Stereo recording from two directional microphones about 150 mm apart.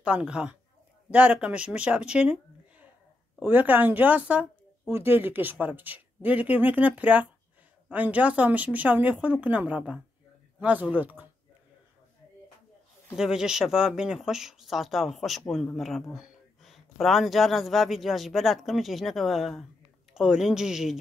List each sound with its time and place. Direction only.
0.0 s a woman's voice: 5° right (ahead or behind)
3.3 s a woman's voice: 10° right (ahead or behind)
13.1 s speech: 5° right (ahead or behind)